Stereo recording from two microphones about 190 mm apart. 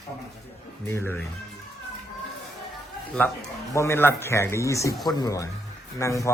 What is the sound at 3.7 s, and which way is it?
Speech, 15° left (ahead or behind).